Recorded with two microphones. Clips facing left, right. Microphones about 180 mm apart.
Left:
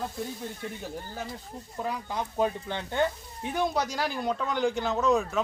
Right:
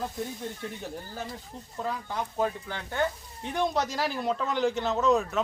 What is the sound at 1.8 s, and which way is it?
Speech, 15° left (ahead or behind).